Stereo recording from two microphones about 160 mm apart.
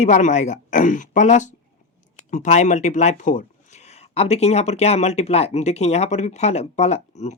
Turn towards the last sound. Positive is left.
turn(degrees=45)  # may be behind; listen again after turning